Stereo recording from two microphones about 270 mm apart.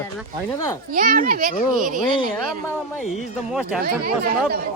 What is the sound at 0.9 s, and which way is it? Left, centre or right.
Speech, right.